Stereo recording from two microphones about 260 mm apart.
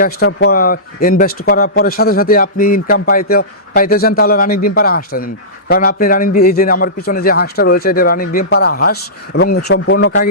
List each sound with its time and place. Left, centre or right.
0.0 s a man's voice: left